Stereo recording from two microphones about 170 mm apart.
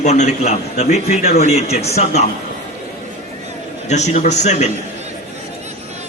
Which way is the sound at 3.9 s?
40° left (ahead or behind).